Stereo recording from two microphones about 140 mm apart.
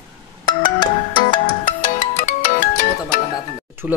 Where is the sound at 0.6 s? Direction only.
35° left (ahead or behind).